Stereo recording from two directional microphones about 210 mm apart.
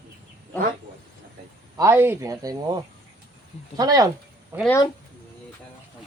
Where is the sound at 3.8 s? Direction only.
20° right (ahead or behind).